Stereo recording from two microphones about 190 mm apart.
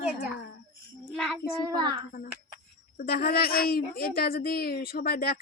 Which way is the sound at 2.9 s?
50° left (ahead or behind).